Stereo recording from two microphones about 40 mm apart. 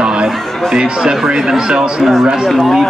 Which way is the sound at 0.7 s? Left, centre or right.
Right.